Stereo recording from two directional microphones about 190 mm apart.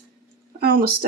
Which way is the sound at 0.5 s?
50° right (ahead or behind).